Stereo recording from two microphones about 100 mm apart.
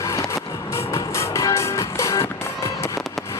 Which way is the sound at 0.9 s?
30° left (ahead or behind).